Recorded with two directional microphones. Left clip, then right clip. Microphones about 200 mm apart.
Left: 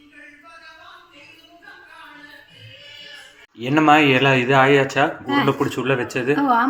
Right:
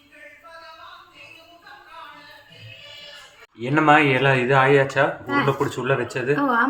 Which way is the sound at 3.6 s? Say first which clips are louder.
Left 2 dB; 20° left (ahead or behind).